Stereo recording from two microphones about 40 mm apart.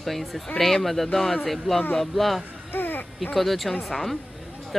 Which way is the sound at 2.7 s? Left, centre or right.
Left.